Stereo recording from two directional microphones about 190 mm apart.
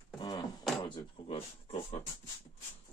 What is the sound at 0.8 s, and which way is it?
Speech, 25° left (ahead or behind).